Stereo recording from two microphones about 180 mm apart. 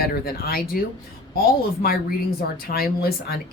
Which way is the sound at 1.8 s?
55° left (ahead or behind).